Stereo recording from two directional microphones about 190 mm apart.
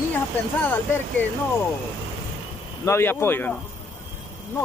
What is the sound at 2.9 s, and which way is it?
Speech, 15° left (ahead or behind).